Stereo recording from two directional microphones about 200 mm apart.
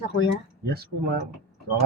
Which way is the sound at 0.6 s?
50° right (ahead or behind).